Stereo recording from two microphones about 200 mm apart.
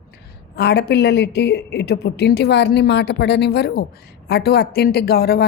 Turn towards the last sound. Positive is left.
turn(degrees=50)  # may be behind; listen again after turning